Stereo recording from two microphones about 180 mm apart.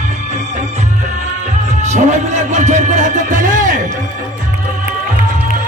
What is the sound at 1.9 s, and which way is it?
Music, 40° right (ahead or behind).